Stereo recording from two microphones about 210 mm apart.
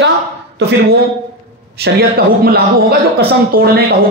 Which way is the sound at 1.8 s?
45° right (ahead or behind).